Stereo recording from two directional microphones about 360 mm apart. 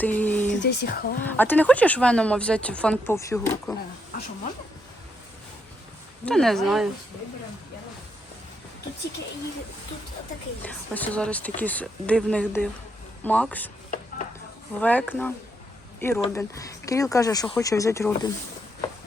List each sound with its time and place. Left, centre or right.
0.0 s a sound: centre
0.4 s speech: left
1.3 s speech: centre
6.2 s speech: centre
10.6 s speech: centre
14.8 s speech: centre